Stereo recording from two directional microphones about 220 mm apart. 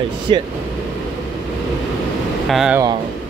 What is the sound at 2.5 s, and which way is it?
Speech, centre (ahead or behind).